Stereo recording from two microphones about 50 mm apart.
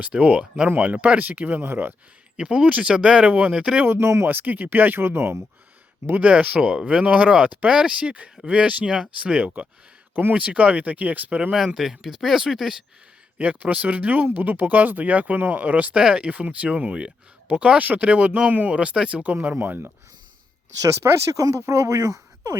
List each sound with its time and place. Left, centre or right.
0.2 s speech: right
2.3 s speech: centre
3.2 s speech: right
3.5 s speech: centre
3.9 s speech: right
4.3 s speech: right
6.1 s speech: right
11.5 s speech: centre
13.4 s speech: right
16.0 s speech: centre; by 19.5 s right
19.5 s speech: right
20.8 s speech: right